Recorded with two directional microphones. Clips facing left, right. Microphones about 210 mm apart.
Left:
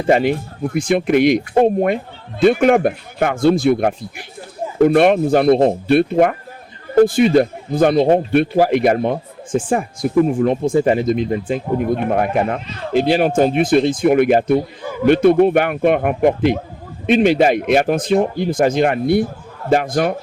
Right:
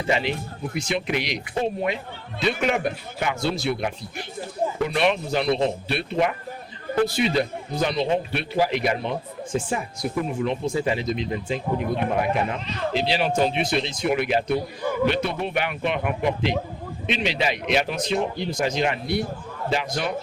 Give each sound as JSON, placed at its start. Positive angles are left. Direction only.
{"t": 0.1, "sound": "a man's voice", "side_deg": 50}